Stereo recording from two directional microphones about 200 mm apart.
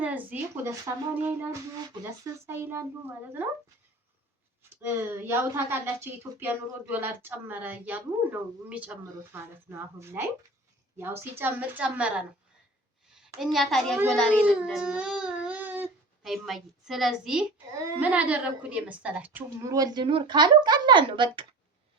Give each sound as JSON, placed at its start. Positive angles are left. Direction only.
{"t": 0.0, "sound": "a woman's voice", "side_deg": -10}
{"t": 4.8, "sound": "a woman's voice", "side_deg": -10}